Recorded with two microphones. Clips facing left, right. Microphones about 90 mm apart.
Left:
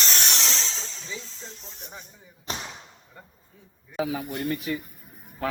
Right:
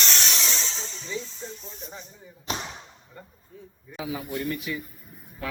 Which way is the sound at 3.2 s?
5° left (ahead or behind).